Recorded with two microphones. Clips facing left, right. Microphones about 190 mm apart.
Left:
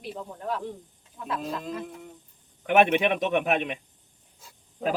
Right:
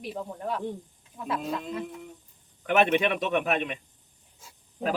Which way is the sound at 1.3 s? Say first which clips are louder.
Right 1 dB; 5° right (ahead or behind).